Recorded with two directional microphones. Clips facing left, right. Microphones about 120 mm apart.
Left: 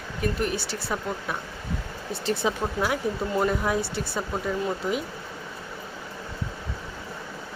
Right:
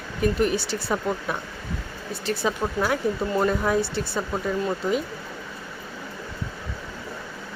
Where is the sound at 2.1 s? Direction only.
25° left (ahead or behind).